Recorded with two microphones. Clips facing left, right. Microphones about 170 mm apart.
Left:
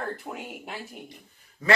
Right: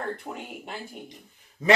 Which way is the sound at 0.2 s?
Centre (ahead or behind).